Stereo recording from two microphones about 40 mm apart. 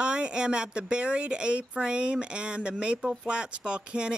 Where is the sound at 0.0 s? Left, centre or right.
Right.